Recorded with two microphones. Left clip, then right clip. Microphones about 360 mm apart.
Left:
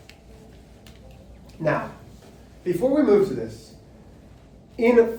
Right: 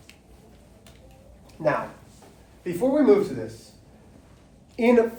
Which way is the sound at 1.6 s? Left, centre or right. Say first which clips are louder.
Even; centre.